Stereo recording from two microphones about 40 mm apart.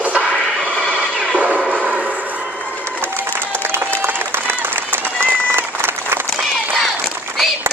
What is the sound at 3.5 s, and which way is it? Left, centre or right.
Applause, right.